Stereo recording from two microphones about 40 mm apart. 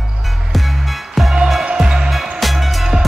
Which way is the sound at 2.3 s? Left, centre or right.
Centre.